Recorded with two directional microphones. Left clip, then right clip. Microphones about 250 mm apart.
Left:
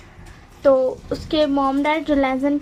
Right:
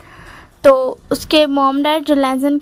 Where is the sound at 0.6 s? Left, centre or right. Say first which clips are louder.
Right 5 dB; right.